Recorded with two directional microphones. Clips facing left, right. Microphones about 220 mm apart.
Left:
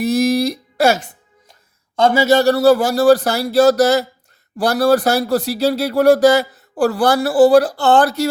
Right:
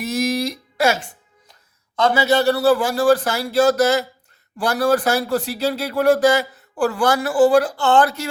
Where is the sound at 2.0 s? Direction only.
45° left (ahead or behind).